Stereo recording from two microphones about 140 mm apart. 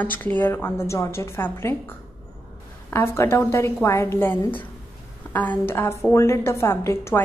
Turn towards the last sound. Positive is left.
turn(degrees=20)  # may be behind; listen again after turning